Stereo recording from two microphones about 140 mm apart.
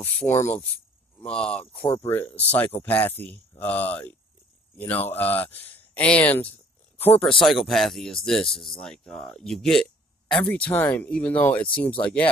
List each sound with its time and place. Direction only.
0.0 s speech: 15° left (ahead or behind)
7.4 s speech: centre (ahead or behind)